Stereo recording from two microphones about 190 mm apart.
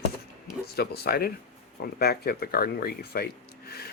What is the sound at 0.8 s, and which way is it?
Speech, 55° left (ahead or behind).